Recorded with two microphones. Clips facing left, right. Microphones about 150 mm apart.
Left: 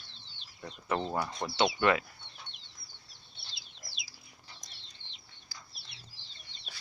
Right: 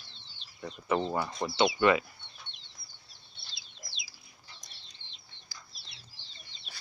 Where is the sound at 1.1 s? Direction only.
5° right (ahead or behind).